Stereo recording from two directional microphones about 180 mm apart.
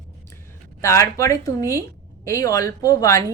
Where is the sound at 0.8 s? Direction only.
15° left (ahead or behind).